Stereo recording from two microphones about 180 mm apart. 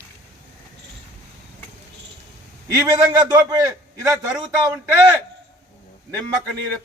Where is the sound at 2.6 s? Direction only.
20° right (ahead or behind).